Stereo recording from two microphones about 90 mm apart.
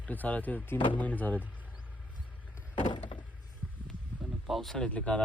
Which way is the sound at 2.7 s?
60° left (ahead or behind).